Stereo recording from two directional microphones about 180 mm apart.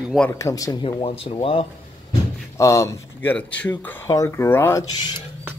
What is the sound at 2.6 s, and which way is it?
Speech, 15° left (ahead or behind).